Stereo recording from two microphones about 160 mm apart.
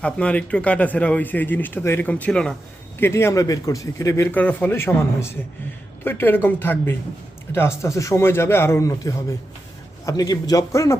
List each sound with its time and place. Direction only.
0.0 s speech: 5° left (ahead or behind)
3.0 s a man's voice: 15° left (ahead or behind)